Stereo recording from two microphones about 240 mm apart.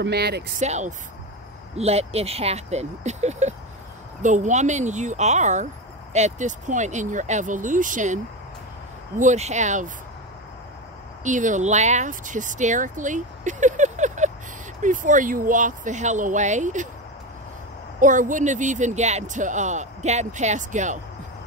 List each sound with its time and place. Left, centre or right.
0.0 s speech: right
0.6 s speech: right
9.2 s speech: right
11.2 s speech: right
18.0 s speech: right